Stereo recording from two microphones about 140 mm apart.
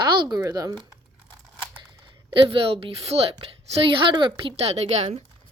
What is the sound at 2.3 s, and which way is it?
Speech, 40° right (ahead or behind).